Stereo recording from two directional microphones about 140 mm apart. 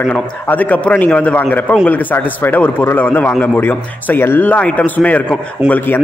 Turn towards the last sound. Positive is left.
turn(degrees=15)  # may be behind; listen again after turning